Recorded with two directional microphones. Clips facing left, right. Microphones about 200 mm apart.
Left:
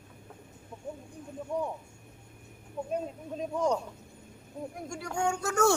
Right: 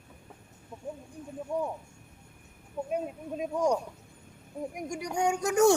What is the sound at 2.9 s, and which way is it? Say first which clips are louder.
Speech: right 1 dB; 10° right (ahead or behind).